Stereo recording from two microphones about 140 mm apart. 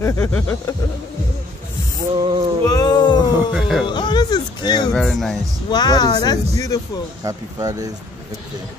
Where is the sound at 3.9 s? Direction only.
35° left (ahead or behind).